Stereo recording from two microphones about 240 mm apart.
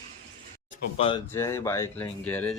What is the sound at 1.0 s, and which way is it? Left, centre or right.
Speech, left.